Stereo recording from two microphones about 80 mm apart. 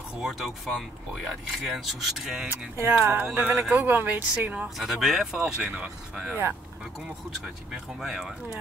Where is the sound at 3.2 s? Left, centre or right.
Centre.